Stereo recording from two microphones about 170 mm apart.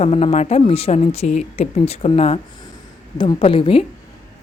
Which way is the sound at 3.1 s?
30° left (ahead or behind).